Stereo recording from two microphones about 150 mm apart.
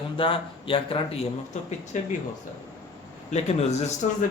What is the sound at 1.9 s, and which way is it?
Speech, 55° left (ahead or behind).